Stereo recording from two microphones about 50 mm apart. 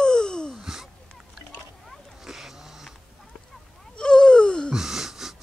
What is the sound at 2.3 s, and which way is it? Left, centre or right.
Dog, centre.